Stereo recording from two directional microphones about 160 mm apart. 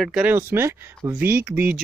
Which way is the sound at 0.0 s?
5° right (ahead or behind).